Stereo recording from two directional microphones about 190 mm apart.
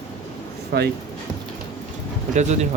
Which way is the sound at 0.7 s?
60° right (ahead or behind).